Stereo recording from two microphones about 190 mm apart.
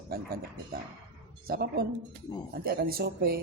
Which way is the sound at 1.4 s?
55° right (ahead or behind).